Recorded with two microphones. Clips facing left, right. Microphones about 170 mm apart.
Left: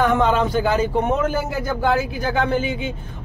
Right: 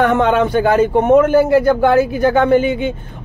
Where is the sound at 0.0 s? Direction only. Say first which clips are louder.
Right 4 dB; 60° right (ahead or behind).